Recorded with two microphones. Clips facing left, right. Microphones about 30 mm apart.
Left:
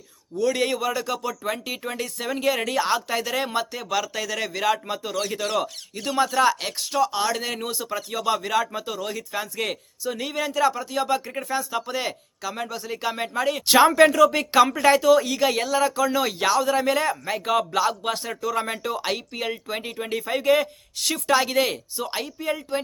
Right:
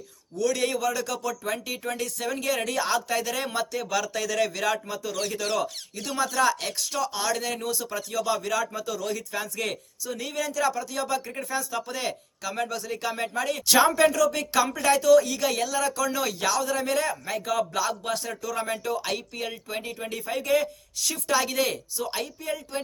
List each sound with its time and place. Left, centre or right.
0.3 s speech: left
4.9 s speech: left
9.3 s speech: centre
10.0 s speech: left
13.7 s speech: left
20.9 s speech: left
21.3 s speech: left
22.1 s speech: left